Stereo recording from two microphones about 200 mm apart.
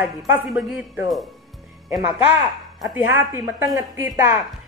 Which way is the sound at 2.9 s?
10° right (ahead or behind).